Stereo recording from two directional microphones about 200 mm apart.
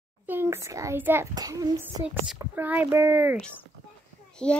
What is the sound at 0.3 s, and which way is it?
A child's voice, 10° right (ahead or behind).